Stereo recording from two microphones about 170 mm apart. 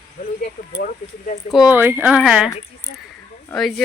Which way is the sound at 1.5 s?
5° right (ahead or behind).